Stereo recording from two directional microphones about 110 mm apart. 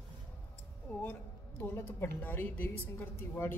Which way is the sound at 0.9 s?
15° left (ahead or behind).